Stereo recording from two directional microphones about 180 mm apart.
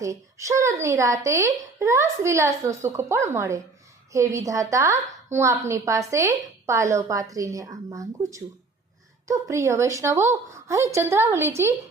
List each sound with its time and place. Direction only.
0.0 s a woman's voice: 15° right (ahead or behind)